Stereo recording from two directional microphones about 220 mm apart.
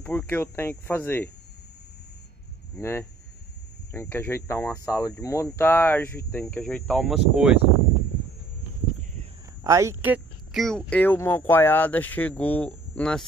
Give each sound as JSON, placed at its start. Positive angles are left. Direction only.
{"t": 0.0, "sound": "speech", "side_deg": 5}
{"t": 2.7, "sound": "speech", "side_deg": 10}
{"t": 9.6, "sound": "speech", "side_deg": -15}